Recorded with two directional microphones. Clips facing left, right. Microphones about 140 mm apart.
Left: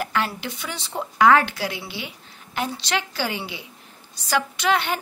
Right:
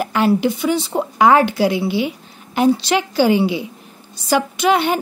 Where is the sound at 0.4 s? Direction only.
10° right (ahead or behind).